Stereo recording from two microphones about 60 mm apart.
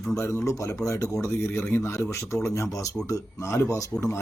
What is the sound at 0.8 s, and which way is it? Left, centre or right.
Speech, left.